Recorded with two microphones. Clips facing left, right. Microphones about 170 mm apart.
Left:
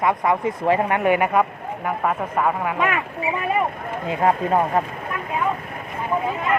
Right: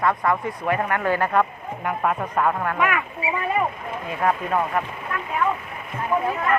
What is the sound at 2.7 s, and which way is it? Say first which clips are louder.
Speech: left 1 dB; 25° left (ahead or behind).